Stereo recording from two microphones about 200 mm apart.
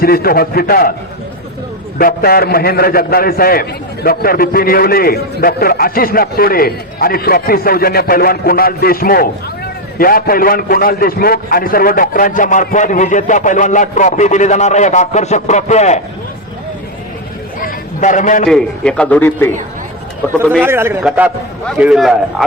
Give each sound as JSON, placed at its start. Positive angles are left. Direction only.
{"t": 0.0, "sound": "a man's voice", "side_deg": 50}
{"t": 2.0, "sound": "a man's voice", "side_deg": 50}
{"t": 17.6, "sound": "a sound", "side_deg": 40}
{"t": 18.4, "sound": "a man's voice", "side_deg": 5}
{"t": 20.6, "sound": "a man's voice", "side_deg": -10}